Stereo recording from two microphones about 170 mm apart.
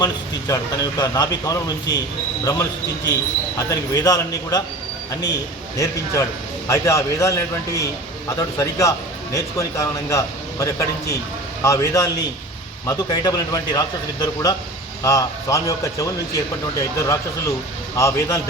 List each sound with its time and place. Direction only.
0.0 s speech: 20° left (ahead or behind)
5.7 s speech: 20° left (ahead or behind)
17.9 s speech: 20° left (ahead or behind)